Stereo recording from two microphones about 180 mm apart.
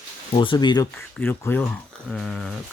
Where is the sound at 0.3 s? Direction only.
25° left (ahead or behind).